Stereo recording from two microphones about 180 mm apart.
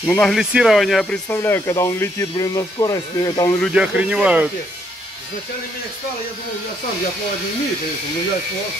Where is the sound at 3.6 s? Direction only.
5° right (ahead or behind).